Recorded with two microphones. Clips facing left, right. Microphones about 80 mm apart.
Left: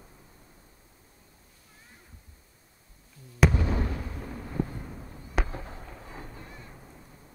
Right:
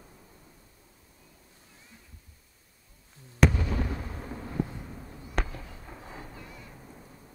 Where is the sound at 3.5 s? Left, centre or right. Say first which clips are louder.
Left 3 dB; left.